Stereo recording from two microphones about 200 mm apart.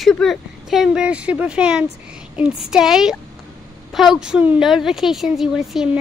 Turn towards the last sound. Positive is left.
turn(degrees=0)  # may be behind; listen again after turning